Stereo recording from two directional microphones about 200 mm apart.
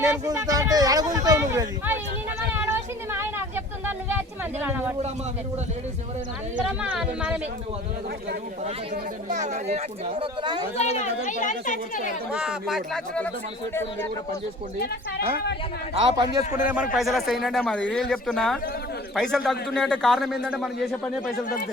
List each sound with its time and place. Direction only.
0.0 s speech: 15° right (ahead or behind)
2.5 s a sound: 10° right (ahead or behind)
4.6 s speech: 10° right (ahead or behind)
6.7 s speech: 5° right (ahead or behind)
9.3 s speech: 35° right (ahead or behind)
10.8 s speech: 35° left (ahead or behind)
12.3 s speech: 5° right (ahead or behind)
16.0 s speech: 20° right (ahead or behind)
16.4 s speech: 35° left (ahead or behind)
16.9 s speech: centre (ahead or behind)